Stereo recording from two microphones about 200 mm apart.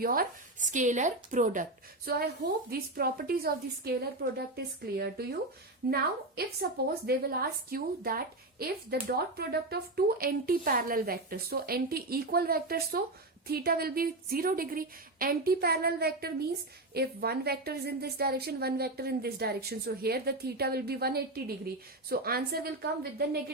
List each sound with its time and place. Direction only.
0.0 s speech: 45° right (ahead or behind)
2.6 s a woman's voice: 50° right (ahead or behind)